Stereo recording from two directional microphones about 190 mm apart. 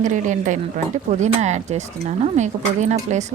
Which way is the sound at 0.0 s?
40° right (ahead or behind).